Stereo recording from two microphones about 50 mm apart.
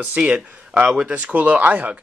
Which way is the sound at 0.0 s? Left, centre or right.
Centre.